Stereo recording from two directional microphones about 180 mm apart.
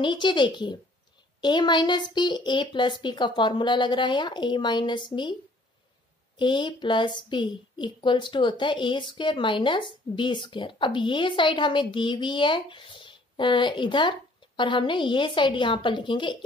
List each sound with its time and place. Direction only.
0.0 s a woman's voice: 25° left (ahead or behind)
6.3 s a woman's voice: 25° left (ahead or behind)